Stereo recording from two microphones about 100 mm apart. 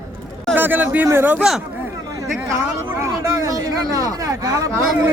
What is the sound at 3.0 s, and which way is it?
Speech, 30° right (ahead or behind).